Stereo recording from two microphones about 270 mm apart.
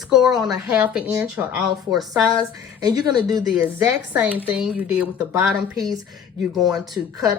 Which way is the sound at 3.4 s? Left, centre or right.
Centre.